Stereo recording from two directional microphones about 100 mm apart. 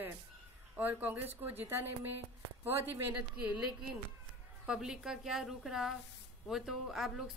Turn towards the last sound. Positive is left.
turn(degrees=-5)  # may be behind; listen again after turning